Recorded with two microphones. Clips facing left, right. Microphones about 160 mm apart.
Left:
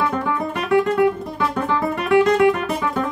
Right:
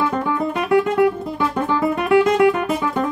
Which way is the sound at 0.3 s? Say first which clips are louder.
Right 2 dB; 25° right (ahead or behind).